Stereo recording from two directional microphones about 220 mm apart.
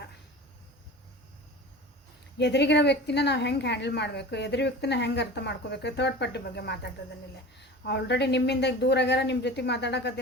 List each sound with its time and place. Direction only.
2.4 s a woman's voice: 50° left (ahead or behind)